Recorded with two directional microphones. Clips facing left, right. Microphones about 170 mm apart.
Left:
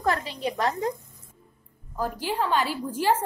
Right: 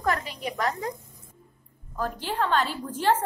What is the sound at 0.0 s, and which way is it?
Speech, 30° left (ahead or behind).